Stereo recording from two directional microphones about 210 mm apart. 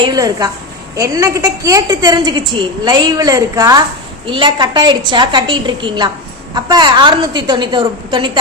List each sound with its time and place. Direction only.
0.0 s a woman's voice: 20° right (ahead or behind)